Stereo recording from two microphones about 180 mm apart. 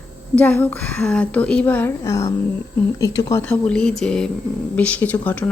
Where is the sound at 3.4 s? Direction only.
5° left (ahead or behind).